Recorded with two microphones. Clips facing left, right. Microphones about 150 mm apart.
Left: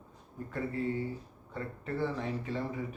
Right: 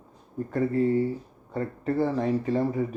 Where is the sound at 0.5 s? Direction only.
40° right (ahead or behind).